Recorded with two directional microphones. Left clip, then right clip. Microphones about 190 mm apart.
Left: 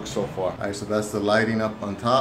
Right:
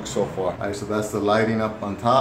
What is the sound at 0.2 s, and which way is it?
Speech, 10° right (ahead or behind).